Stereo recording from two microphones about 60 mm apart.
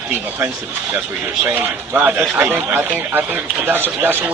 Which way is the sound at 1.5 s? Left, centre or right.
Right.